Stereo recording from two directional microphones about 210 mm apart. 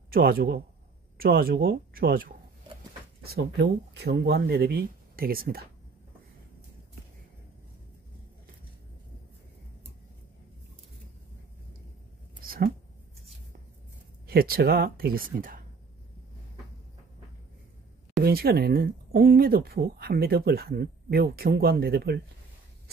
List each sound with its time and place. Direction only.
0.1 s speech: 45° right (ahead or behind)
12.4 s a sound: 45° right (ahead or behind)
14.2 s speech: 45° right (ahead or behind)
18.2 s speech: 50° right (ahead or behind)